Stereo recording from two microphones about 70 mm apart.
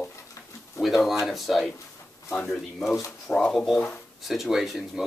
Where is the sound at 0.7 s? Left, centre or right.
Centre.